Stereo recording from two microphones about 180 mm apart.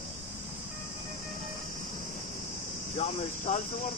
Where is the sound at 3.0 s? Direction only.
40° left (ahead or behind).